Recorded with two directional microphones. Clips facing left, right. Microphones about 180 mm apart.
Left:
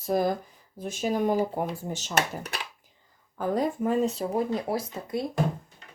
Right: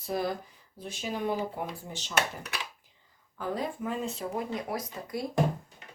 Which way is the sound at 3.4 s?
45° left (ahead or behind).